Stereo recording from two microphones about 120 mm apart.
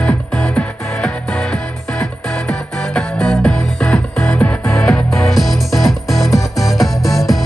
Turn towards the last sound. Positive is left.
turn(degrees=0)  # may be behind; listen again after turning